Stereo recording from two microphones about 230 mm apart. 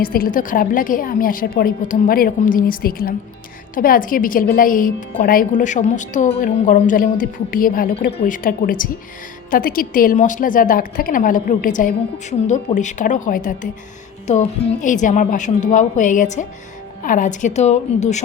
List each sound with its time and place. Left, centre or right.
0.0 s a woman's voice: left